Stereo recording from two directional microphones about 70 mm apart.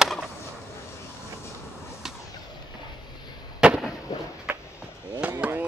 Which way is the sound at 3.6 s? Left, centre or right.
Centre.